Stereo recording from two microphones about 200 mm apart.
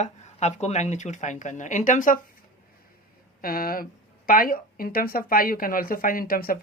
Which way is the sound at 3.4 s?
45° left (ahead or behind).